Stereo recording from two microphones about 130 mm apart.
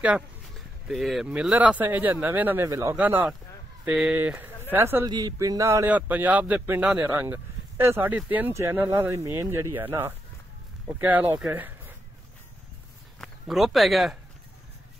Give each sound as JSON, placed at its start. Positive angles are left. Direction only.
{"t": 0.6, "sound": "speech", "side_deg": 0}
{"t": 5.0, "sound": "speech", "side_deg": -30}
{"t": 5.9, "sound": "speech", "side_deg": -10}
{"t": 13.2, "sound": "speech", "side_deg": 0}